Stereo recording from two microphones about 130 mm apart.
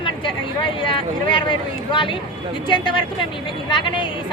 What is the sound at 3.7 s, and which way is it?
Speech, 40° left (ahead or behind).